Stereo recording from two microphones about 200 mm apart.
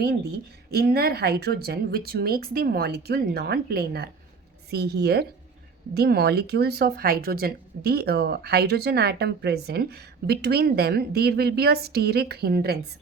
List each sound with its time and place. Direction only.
0.0 s speech: 50° right (ahead or behind)